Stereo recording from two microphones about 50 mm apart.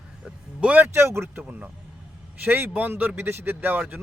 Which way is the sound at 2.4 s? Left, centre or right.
Right.